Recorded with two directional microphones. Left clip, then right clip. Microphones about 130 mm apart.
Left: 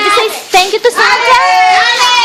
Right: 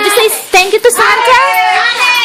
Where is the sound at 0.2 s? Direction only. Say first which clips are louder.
Right 1 dB; 15° right (ahead or behind).